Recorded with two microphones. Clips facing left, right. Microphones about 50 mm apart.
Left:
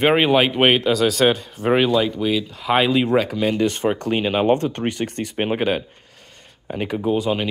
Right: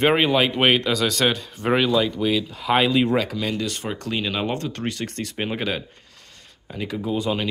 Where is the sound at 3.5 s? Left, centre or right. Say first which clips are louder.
Left 8 dB; left.